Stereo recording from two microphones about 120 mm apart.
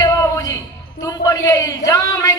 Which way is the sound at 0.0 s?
30° left (ahead or behind).